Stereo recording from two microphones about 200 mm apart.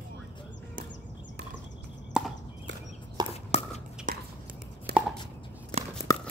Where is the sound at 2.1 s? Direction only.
5° right (ahead or behind).